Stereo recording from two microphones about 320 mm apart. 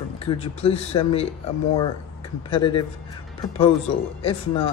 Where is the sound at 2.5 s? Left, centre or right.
Centre.